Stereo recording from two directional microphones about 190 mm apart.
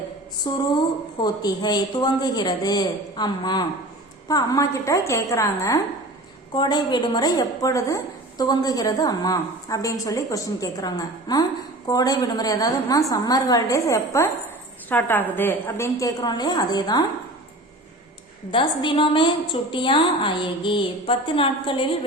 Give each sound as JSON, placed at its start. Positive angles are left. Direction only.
{"t": 0.4, "sound": "a woman's voice", "side_deg": 25}
{"t": 18.5, "sound": "a woman's voice", "side_deg": 25}